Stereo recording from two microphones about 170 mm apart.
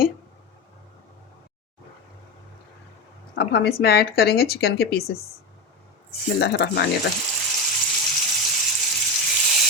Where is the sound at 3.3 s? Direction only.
75° left (ahead or behind).